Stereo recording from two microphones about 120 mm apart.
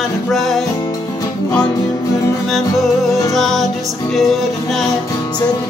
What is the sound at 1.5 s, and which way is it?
Music, 30° left (ahead or behind).